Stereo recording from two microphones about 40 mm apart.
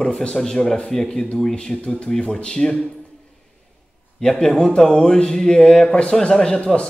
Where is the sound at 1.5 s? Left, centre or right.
Left.